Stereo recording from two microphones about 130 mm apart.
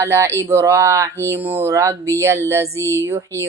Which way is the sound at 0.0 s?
20° right (ahead or behind).